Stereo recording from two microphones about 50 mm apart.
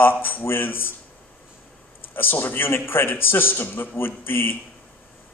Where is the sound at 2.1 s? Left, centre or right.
Left.